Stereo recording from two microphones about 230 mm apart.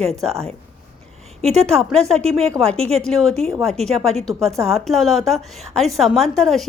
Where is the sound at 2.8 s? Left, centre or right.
Right.